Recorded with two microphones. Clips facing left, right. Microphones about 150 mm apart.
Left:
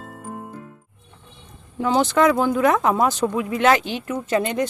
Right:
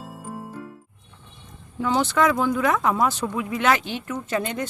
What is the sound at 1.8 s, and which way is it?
Speech, 20° left (ahead or behind).